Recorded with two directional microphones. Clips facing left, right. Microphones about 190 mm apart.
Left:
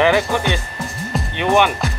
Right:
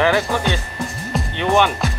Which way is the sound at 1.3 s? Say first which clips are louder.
Left 1 dB; 15° left (ahead or behind).